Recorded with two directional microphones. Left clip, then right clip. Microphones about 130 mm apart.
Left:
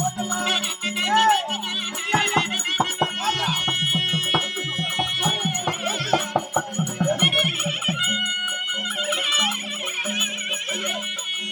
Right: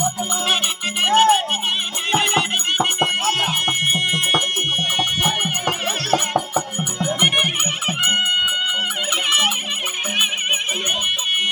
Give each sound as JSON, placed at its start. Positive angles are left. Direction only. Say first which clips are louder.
{"t": 1.0, "sound": "music", "louder": "right 4 dB", "side_deg": -20}
{"t": 7.2, "sound": "music", "louder": "right 5 dB", "side_deg": -25}